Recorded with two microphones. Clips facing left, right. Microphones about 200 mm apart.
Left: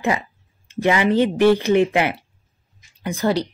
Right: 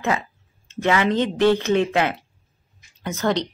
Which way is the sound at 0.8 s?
10° left (ahead or behind).